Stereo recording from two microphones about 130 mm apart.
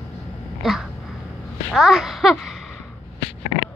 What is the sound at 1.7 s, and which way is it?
A child's voice, 5° right (ahead or behind).